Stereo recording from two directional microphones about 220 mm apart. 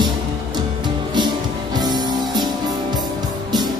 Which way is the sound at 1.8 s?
20° right (ahead or behind).